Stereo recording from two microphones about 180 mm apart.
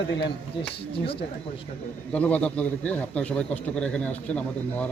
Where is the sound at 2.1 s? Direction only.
5° left (ahead or behind).